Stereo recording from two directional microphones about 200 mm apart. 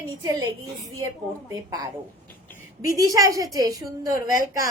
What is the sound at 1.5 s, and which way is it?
Speech, 15° right (ahead or behind).